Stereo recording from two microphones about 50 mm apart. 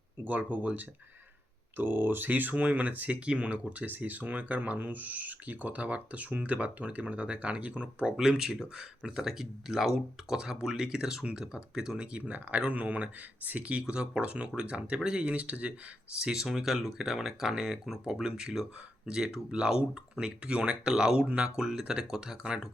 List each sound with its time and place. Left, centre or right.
0.5 s speech: right
8.1 s speech: centre; by 15.7 s right
16.2 s speech: centre